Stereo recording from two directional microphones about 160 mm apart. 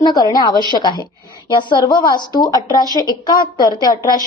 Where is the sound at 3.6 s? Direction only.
25° left (ahead or behind).